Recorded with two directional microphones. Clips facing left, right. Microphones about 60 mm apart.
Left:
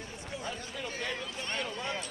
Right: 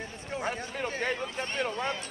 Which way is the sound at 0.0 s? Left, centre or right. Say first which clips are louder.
Right 6 dB; right.